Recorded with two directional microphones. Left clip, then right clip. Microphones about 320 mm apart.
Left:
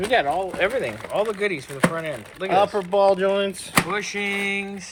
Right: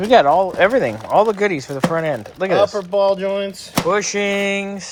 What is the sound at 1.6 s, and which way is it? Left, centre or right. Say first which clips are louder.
Speech: right 5 dB; centre.